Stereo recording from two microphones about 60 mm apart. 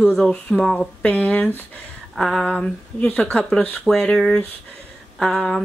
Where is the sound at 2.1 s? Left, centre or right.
Centre.